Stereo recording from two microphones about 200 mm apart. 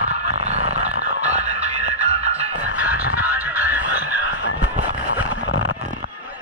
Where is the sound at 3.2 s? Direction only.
10° right (ahead or behind).